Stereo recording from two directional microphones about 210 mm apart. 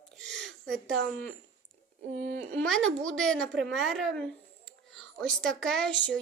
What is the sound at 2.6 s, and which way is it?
A woman's voice, centre (ahead or behind).